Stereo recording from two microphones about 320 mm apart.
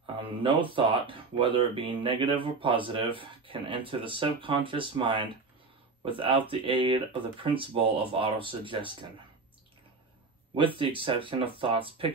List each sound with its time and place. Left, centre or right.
0.0 s speech: centre
10.8 s speech: centre